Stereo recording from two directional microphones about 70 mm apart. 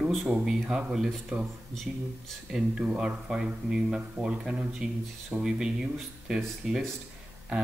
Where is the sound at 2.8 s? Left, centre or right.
Centre.